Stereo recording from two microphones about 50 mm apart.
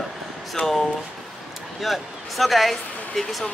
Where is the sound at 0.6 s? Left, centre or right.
Left.